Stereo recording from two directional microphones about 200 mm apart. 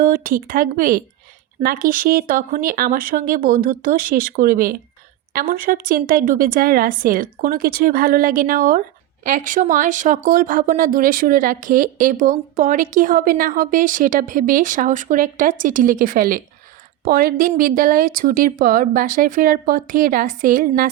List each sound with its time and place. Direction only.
0.0 s a woman's voice: 45° right (ahead or behind)